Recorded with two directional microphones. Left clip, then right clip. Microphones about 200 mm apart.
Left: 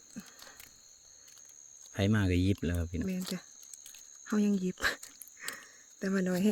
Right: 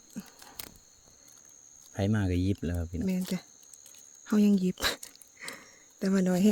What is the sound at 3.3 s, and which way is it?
Speech, 65° right (ahead or behind).